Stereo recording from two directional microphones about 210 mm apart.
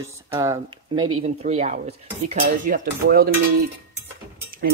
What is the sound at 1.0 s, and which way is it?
Speech, 90° right.